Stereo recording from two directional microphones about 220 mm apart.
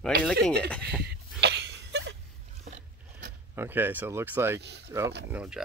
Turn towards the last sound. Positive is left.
turn(degrees=-5)  # may be behind; listen again after turning